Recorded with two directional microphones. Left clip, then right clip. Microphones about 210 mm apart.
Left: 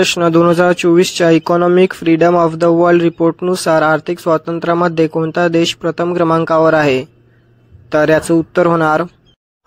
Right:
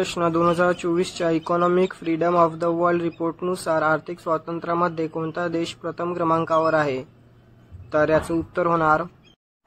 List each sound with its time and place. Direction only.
0.0 s speech: 35° left (ahead or behind)